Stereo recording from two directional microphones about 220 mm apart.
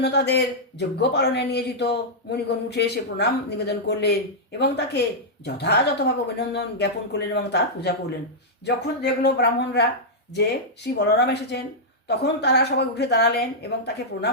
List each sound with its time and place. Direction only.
0.0 s speech: 50° left (ahead or behind)
10.9 s speech: 50° left (ahead or behind)